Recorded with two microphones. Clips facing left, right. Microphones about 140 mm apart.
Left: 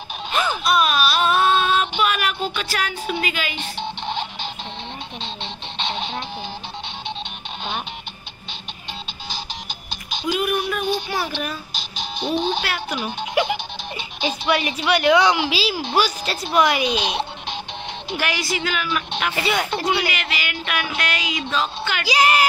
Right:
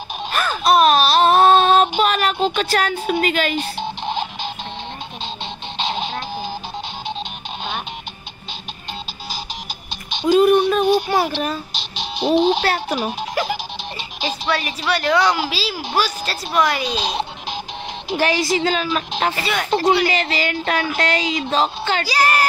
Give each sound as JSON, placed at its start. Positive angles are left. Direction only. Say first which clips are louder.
{"t": 0.3, "sound": "music", "louder": "even", "side_deg": 20}
{"t": 0.7, "sound": "child singing", "louder": "right 8 dB", "side_deg": -40}
{"t": 2.5, "sound": "speech", "louder": "right 6 dB", "side_deg": -45}
{"t": 5.8, "sound": "music", "louder": "right 3 dB", "side_deg": -35}
{"t": 10.2, "sound": "child singing", "louder": "right 9 dB", "side_deg": -35}
{"t": 11.7, "sound": "a sound", "louder": "right 2 dB", "side_deg": 0}
{"t": 12.5, "sound": "child singing", "louder": "right 5 dB", "side_deg": -35}
{"t": 14.5, "sound": "a woman's voice", "louder": "left 2 dB", "side_deg": 20}
{"t": 16.8, "sound": "child singing", "louder": "left 1 dB", "side_deg": -30}
{"t": 19.3, "sound": "a woman's voice", "louder": "left 1 dB", "side_deg": 20}
{"t": 19.7, "sound": "child singing", "louder": "right 6 dB", "side_deg": -30}
{"t": 22.0, "sound": "speech", "louder": "left 2 dB", "side_deg": 20}